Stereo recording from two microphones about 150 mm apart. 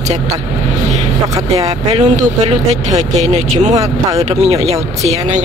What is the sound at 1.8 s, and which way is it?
Speech, 50° right (ahead or behind).